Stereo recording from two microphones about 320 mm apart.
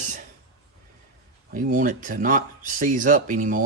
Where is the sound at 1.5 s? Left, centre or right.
Right.